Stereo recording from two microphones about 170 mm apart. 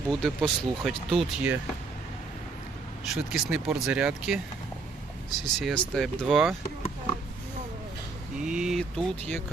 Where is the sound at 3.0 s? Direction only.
Centre (ahead or behind).